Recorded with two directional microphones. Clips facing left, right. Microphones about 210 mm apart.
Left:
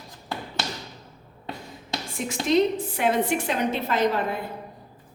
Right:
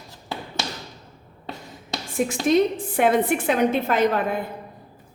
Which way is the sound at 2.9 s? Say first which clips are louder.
Right 5 dB; 55° right (ahead or behind).